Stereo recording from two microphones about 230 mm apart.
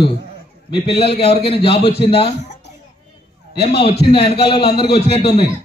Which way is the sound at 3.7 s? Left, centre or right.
Left.